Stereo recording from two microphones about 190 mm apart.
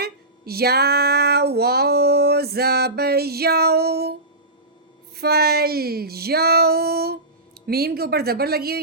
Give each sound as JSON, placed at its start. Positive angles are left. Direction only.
{"t": 0.0, "sound": "female singing", "side_deg": -55}
{"t": 5.1, "sound": "female singing", "side_deg": -55}